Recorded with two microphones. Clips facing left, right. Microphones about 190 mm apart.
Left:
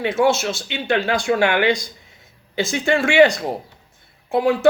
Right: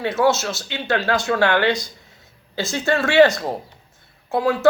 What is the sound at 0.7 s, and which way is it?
Speech, 15° left (ahead or behind).